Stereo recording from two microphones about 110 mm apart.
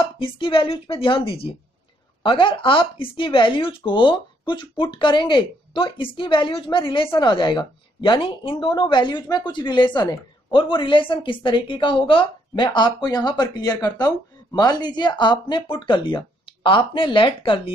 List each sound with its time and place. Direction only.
0.2 s a woman's voice: 55° left (ahead or behind)
12.6 s speech: 40° left (ahead or behind)